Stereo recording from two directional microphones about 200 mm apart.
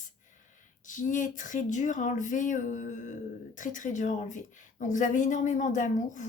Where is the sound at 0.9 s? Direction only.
40° left (ahead or behind).